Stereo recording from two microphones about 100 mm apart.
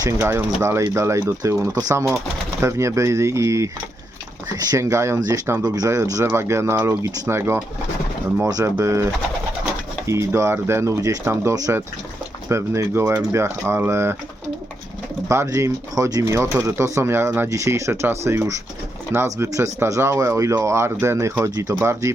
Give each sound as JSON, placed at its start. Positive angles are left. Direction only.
{"t": 0.0, "sound": "speech", "side_deg": -35}
{"t": 8.4, "sound": "speech", "side_deg": -35}
{"t": 10.1, "sound": "speech", "side_deg": -30}
{"t": 15.3, "sound": "speech", "side_deg": -30}
{"t": 16.2, "sound": "speech", "side_deg": -25}